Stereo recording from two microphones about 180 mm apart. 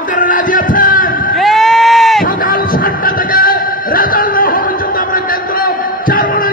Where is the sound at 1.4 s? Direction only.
Centre (ahead or behind).